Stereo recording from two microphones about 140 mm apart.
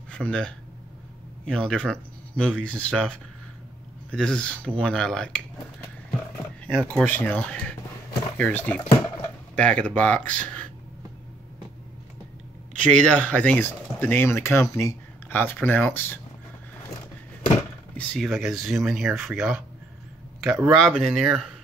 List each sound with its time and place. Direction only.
0.1 s speech: 5° left (ahead or behind)
6.6 s speech: 10° left (ahead or behind)
12.8 s speech: 10° left (ahead or behind)
17.9 s speech: centre (ahead or behind)
20.4 s speech: 15° right (ahead or behind)
20.8 s speech: 5° left (ahead or behind)